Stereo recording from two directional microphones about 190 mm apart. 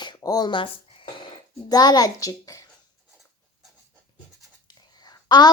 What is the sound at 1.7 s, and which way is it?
Speech, 20° left (ahead or behind).